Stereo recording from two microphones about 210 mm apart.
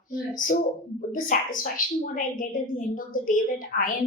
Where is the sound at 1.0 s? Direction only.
40° left (ahead or behind).